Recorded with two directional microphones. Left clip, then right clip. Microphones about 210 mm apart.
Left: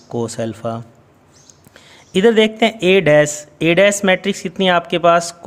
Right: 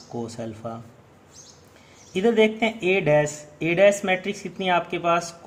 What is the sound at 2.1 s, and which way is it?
Speech, 45° left (ahead or behind).